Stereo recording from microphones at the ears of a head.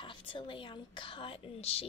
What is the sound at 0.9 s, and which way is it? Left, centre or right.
Speech, left.